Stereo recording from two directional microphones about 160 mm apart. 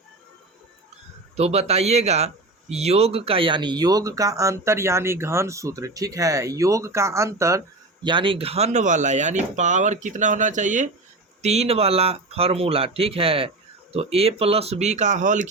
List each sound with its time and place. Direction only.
1.4 s speech: 40° right (ahead or behind); by 7.6 s 20° right (ahead or behind)
8.0 s speech: 30° right (ahead or behind); by 15.4 s 50° right (ahead or behind)